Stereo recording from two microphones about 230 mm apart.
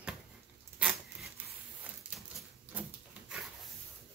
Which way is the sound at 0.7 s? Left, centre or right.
Centre.